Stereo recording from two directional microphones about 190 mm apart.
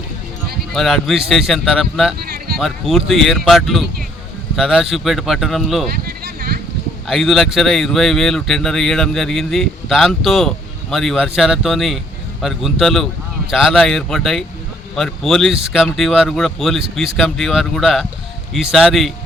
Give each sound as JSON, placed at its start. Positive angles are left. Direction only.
{"t": 0.7, "sound": "speech", "side_deg": 0}
{"t": 5.9, "sound": "a sound", "side_deg": -50}
{"t": 7.1, "sound": "speech", "side_deg": 0}